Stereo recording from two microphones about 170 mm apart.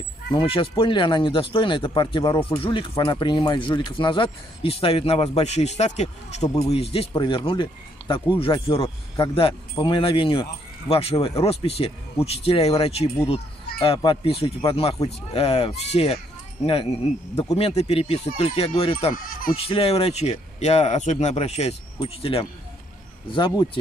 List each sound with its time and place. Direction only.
0.4 s speech: 30° left (ahead or behind)